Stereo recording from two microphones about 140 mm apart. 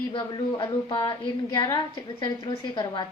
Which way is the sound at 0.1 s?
35° left (ahead or behind).